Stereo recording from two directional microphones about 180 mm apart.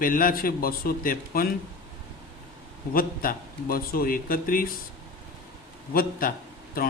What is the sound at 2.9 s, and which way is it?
A man's voice, 50° left (ahead or behind).